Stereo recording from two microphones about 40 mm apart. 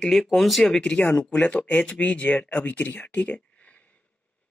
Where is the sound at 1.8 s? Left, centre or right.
Left.